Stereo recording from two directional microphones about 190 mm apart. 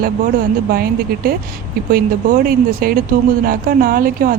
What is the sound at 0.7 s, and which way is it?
Speech, 50° right (ahead or behind).